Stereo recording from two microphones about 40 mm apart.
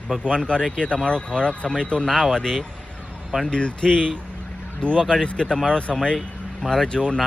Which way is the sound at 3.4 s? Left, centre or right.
Left.